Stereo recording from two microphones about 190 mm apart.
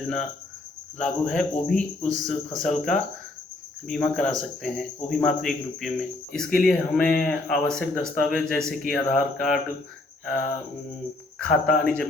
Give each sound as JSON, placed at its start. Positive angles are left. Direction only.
{"t": 0.9, "sound": "a man's voice", "side_deg": 5}
{"t": 10.2, "sound": "mantra", "side_deg": 5}
{"t": 11.4, "sound": "a man's voice", "side_deg": 5}